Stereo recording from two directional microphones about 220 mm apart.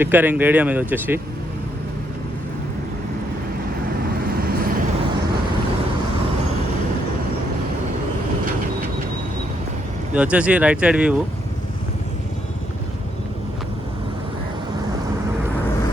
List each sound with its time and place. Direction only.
0.0 s speech: 10° right (ahead or behind)
4.3 s vehicle: 45° right (ahead or behind)
10.2 s speech: 5° right (ahead or behind)